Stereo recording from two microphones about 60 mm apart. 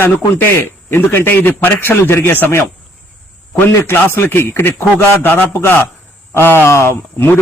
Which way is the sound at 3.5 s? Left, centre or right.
Left.